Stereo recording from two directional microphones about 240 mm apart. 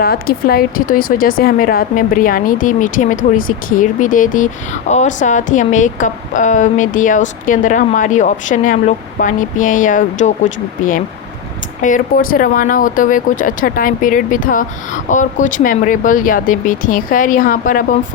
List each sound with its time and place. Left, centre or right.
0.0 s speech: left